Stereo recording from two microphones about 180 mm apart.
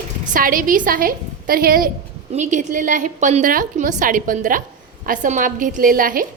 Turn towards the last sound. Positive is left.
turn(degrees=-50)  # may be behind; listen again after turning